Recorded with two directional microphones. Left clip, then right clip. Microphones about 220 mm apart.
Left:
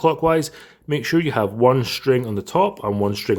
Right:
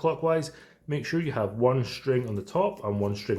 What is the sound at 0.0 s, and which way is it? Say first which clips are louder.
Speech: left 8 dB; 40° left (ahead or behind).